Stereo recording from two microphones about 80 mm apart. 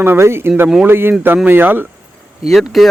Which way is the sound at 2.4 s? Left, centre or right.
Centre.